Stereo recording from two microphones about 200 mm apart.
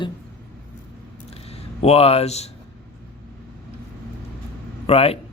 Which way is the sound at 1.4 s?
30° left (ahead or behind).